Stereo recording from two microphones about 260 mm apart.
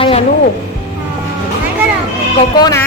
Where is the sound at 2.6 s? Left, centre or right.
Centre.